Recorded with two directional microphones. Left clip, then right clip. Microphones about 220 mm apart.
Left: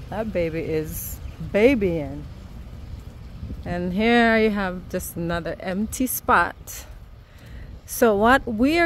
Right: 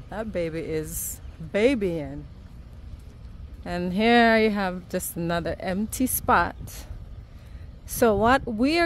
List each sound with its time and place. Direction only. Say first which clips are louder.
0.1 s speech: left 4 dB; 10° right (ahead or behind)
3.6 s a woman's voice: left 1 dB; 20° right (ahead or behind)
7.9 s speech: left 3 dB; 15° right (ahead or behind)